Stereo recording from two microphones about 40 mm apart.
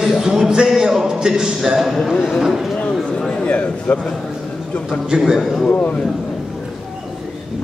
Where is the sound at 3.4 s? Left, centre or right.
Left.